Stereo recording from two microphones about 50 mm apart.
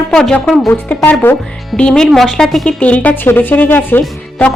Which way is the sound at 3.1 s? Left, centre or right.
Left.